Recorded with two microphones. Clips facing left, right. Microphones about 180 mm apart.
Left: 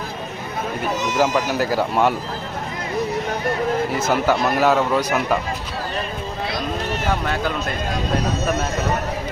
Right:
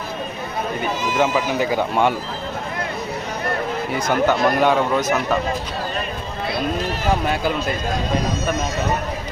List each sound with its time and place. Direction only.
0.8 s speech: centre (ahead or behind)
3.9 s speech: 5° left (ahead or behind)